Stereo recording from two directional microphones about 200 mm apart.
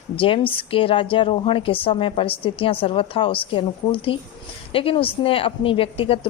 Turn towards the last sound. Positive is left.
turn(degrees=25)  # may be behind; listen again after turning